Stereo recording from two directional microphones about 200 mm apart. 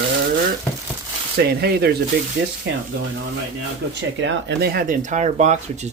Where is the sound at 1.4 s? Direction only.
50° right (ahead or behind).